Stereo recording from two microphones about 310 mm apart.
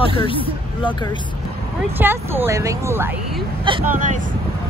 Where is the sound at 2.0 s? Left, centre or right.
Centre.